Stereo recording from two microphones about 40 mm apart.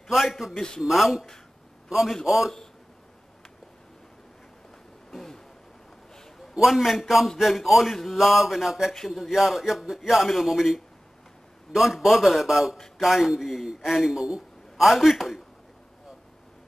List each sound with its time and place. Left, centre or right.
0.1 s speech: centre
0.6 s a man's voice: centre
0.8 s a man's voice: centre
2.2 s speech: centre
5.1 s a sound: centre
6.6 s speech: centre
8.9 s speech: centre
9.3 s a man's voice: centre
14.1 s a man's voice: centre
14.8 s speech: centre